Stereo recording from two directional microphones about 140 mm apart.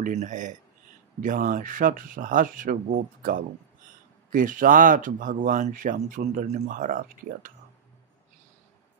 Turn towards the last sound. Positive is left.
turn(degrees=-70)  # may be behind; listen again after turning